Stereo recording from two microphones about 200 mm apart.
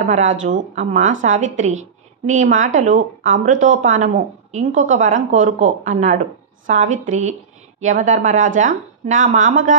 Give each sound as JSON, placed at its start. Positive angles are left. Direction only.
{"t": 0.0, "sound": "speech", "side_deg": -35}